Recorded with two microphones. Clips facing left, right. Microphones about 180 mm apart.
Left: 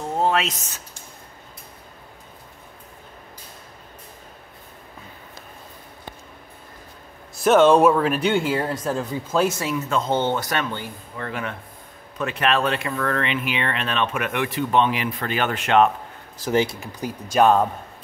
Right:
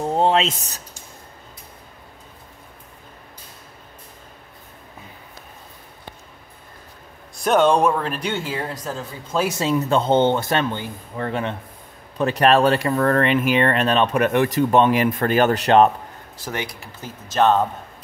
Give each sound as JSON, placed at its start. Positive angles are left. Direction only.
{"t": 0.0, "sound": "a sound", "side_deg": -30}
{"t": 7.4, "sound": "speech", "side_deg": 0}
{"t": 9.5, "sound": "speech", "side_deg": -20}
{"t": 9.8, "sound": "speech", "side_deg": -30}
{"t": 16.5, "sound": "speech", "side_deg": 20}